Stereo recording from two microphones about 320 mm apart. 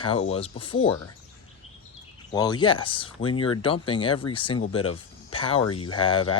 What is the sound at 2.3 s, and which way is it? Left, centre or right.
Speech, centre.